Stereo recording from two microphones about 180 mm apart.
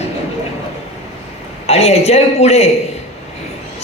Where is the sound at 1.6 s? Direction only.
35° left (ahead or behind).